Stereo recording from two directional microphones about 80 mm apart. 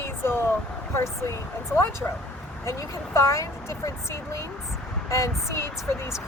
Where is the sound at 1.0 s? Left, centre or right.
Left.